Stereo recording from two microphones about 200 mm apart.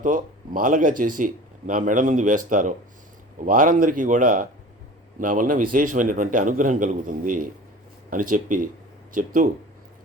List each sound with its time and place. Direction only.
0.0 s speech: 40° right (ahead or behind)